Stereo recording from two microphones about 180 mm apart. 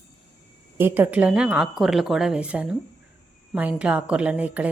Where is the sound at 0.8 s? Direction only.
10° right (ahead or behind).